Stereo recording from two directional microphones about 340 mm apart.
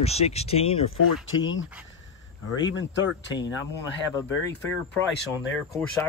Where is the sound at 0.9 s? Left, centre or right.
Left.